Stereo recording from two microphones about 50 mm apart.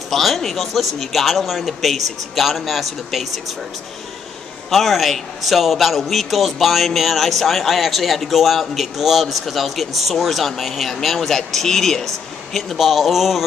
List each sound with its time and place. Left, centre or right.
0.1 s a man's voice: centre
4.6 s a man's voice: centre